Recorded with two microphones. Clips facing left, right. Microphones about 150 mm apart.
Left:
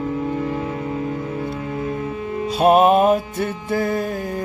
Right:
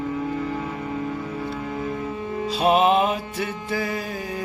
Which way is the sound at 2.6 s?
50° left (ahead or behind).